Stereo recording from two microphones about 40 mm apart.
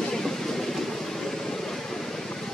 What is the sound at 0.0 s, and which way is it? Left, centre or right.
Vehicle, centre.